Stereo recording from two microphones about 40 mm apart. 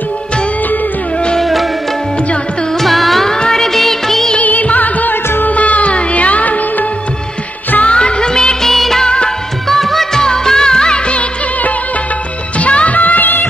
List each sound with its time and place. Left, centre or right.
1.4 s music: centre
2.8 s music: centre
3.3 s music: centre
4.4 s music: left
7.8 s music: left
8.6 s music of bollywood: centre
9.0 s music of bollywood: left
9.7 s music: centre
10.2 s music of bollywood: centre
12.5 s music of bollywood: left